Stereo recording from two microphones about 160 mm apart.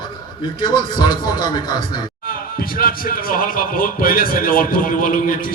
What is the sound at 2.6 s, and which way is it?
A man's voice, 65° left (ahead or behind).